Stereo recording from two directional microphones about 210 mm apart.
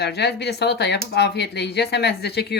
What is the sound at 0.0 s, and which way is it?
Speech, 50° left (ahead or behind).